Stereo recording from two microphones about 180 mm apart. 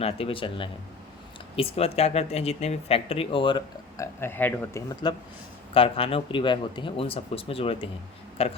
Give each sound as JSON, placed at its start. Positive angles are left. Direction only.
{"t": 0.0, "sound": "speech", "side_deg": 30}
{"t": 5.7, "sound": "speech", "side_deg": 30}